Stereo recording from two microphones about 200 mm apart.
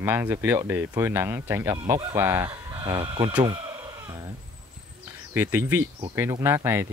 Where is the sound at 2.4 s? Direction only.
25° right (ahead or behind).